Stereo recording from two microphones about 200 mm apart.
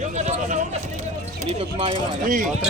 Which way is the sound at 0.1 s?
35° right (ahead or behind).